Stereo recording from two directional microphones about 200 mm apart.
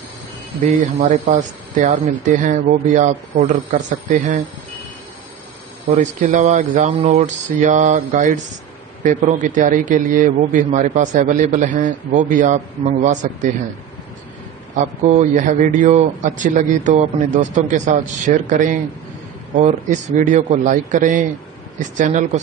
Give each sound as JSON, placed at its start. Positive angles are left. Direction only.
{"t": 0.6, "sound": "a man's voice", "side_deg": -40}
{"t": 6.2, "sound": "a man's voice", "side_deg": -40}
{"t": 15.0, "sound": "a man's voice", "side_deg": -40}